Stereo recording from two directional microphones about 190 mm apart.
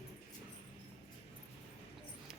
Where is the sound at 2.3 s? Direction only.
Centre (ahead or behind).